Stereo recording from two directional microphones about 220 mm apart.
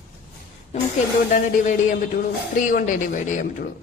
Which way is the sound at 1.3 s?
35° left (ahead or behind).